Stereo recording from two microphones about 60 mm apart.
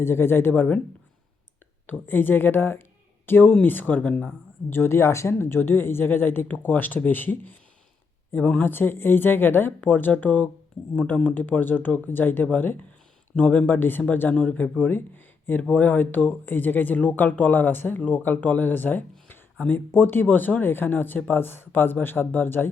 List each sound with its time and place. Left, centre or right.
0.0 s speech: left
1.9 s speech: left
4.7 s speech: left
5.3 s speech: left
8.6 s speech: left